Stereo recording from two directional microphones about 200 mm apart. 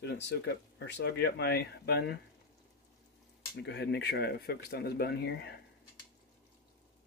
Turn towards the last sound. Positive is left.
turn(degrees=55)  # may be behind; listen again after turning